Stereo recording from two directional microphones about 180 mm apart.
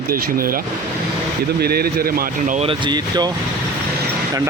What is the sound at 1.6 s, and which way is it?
Speech, 60° right (ahead or behind).